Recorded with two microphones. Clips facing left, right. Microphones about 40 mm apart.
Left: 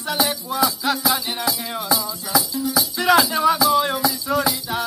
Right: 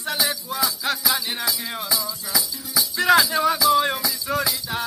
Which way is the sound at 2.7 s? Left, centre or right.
Centre.